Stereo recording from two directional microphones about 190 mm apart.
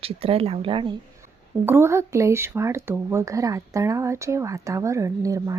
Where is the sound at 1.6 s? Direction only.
10° right (ahead or behind).